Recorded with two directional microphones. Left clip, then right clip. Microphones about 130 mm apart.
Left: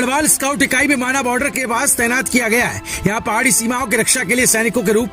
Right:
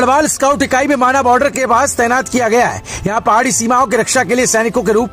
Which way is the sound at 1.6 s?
55° left (ahead or behind).